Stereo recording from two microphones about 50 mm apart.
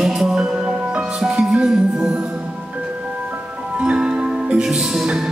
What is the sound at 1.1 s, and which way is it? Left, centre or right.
Music, centre.